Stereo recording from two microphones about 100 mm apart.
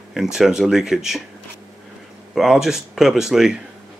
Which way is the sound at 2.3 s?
5° right (ahead or behind).